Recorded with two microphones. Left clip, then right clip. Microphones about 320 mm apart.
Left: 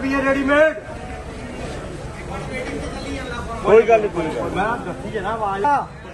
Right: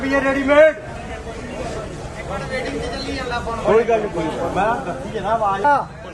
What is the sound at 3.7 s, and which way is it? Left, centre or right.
Speech, left.